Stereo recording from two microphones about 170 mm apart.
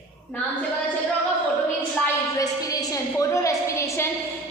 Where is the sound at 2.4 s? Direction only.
20° left (ahead or behind).